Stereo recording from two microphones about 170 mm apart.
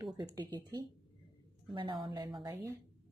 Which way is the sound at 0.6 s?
25° right (ahead or behind).